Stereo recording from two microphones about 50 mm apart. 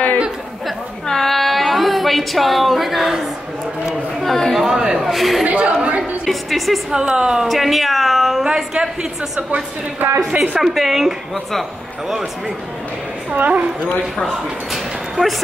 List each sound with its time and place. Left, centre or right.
1.0 s a sound: centre
4.2 s speech: centre
4.6 s a man's voice: centre
5.4 s a woman's voice: right
6.2 s speech: centre
6.9 s a man's voice: centre
7.4 s speech: centre
8.5 s a man's voice: centre
9.5 s a woman's voice: right
10.3 s a woman's voice: right
10.6 s speech: centre
13.3 s a woman's voice: right
14.7 s bow-wow: centre